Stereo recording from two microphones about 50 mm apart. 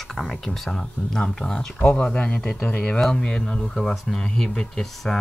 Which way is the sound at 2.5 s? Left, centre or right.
Left.